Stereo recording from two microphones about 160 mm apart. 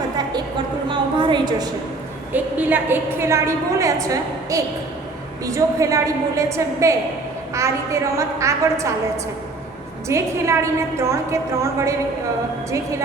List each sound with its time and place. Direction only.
0.9 s a sound: 30° right (ahead or behind)
2.3 s a woman's voice: 10° right (ahead or behind)
10.1 s a woman's voice: 20° right (ahead or behind)